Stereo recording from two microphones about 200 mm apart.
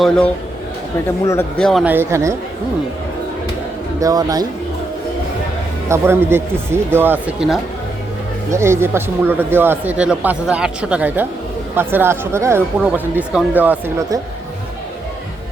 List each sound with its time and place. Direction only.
1.2 s speech: 15° left (ahead or behind)
1.9 s speech: 10° right (ahead or behind)
4.0 s speech: 20° right (ahead or behind)
5.9 s speech: 10° right (ahead or behind)
8.4 s speech: 15° right (ahead or behind)